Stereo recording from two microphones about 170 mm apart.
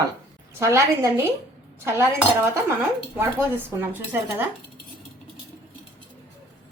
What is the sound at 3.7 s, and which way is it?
Speech, 10° right (ahead or behind).